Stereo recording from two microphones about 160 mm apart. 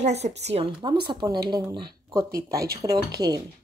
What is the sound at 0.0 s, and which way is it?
Speech, 45° right (ahead or behind).